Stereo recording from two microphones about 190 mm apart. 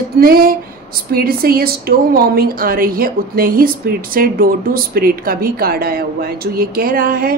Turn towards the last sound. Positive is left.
turn(degrees=-50)  # may be behind; listen again after turning